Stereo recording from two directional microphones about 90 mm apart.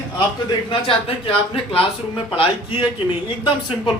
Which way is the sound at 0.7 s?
75° left (ahead or behind).